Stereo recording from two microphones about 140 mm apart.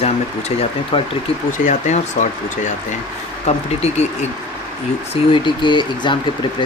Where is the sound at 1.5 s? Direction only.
65° left (ahead or behind).